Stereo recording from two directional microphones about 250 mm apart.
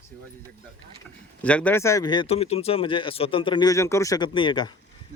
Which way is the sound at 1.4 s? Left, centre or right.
Centre.